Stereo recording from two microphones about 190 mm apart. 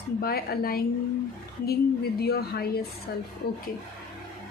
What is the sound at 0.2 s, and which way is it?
Speech, 55° left (ahead or behind).